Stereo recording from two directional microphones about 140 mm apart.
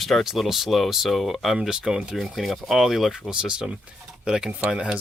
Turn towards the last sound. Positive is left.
turn(degrees=-5)  # may be behind; listen again after turning